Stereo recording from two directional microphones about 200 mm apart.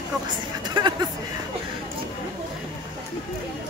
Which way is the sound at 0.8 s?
20° right (ahead or behind).